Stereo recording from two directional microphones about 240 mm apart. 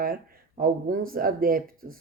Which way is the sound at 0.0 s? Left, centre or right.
Right.